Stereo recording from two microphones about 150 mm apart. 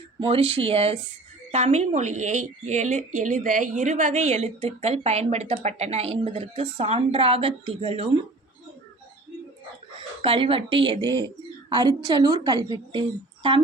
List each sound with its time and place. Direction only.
0.2 s a woman's voice: 40° right (ahead or behind)
10.2 s a woman's voice: 40° right (ahead or behind)